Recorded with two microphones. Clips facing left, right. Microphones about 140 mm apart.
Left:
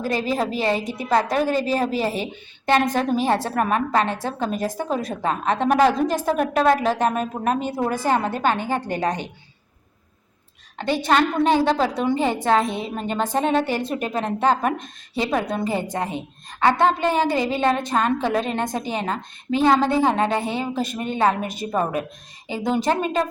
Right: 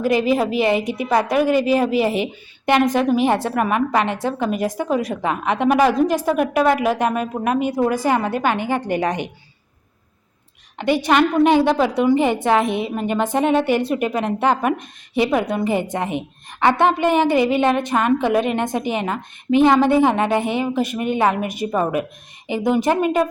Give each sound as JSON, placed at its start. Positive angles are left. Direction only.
{"t": 0.0, "sound": "a woman's voice", "side_deg": -15}
{"t": 7.2, "sound": "speech", "side_deg": 35}
{"t": 7.6, "sound": "a woman's voice", "side_deg": -15}
{"t": 10.8, "sound": "a woman's voice", "side_deg": -15}